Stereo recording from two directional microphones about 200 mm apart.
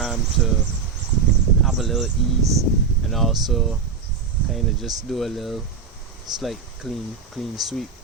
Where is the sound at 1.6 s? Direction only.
Centre (ahead or behind).